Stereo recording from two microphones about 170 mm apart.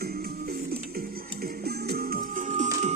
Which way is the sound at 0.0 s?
65° right (ahead or behind).